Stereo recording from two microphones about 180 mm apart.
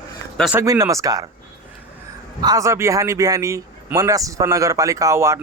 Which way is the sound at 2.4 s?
20° right (ahead or behind).